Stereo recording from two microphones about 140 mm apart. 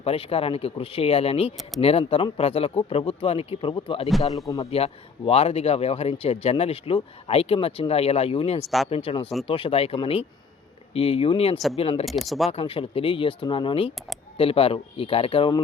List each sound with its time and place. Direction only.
0.0 s speech: 45° left (ahead or behind)
8.6 s speech: centre (ahead or behind)
9.0 s speech: 40° left (ahead or behind)
12.0 s speech: centre (ahead or behind)
12.5 s speech: 45° left (ahead or behind)